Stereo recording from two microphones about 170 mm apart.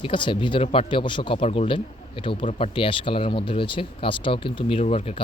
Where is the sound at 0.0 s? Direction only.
30° left (ahead or behind).